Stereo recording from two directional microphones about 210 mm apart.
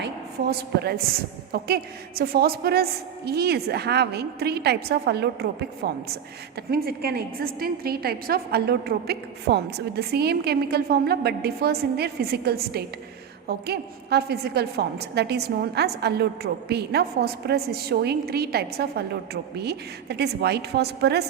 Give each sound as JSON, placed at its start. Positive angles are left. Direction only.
{"t": 0.0, "sound": "a woman's voice", "side_deg": -50}